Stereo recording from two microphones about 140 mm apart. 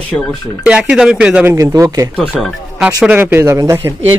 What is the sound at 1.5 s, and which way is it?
Speech, 20° right (ahead or behind).